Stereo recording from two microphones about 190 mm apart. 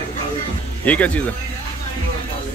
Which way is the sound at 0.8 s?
10° left (ahead or behind).